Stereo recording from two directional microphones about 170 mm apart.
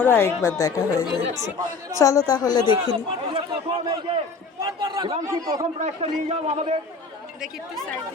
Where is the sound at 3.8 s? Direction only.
25° right (ahead or behind).